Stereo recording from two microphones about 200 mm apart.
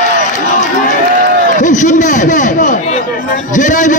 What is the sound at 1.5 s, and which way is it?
A man's voice, 40° left (ahead or behind).